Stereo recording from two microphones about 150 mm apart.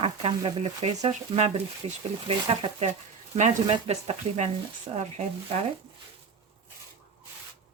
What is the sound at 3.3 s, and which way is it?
Speech, 55° right (ahead or behind).